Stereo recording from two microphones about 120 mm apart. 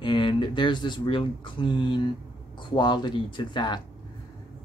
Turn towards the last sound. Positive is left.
turn(degrees=40)  # may be behind; listen again after turning